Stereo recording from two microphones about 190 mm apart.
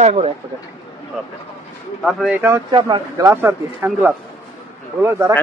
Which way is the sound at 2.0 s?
Centre (ahead or behind).